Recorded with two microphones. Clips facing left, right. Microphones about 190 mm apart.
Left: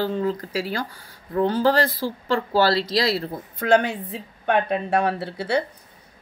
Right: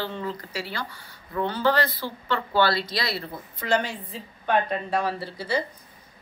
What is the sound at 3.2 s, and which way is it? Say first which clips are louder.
Speech: left 6 dB; 55° left (ahead or behind).